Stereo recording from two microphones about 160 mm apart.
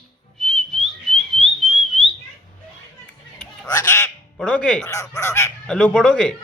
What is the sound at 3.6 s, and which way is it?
Quack, 20° left (ahead or behind).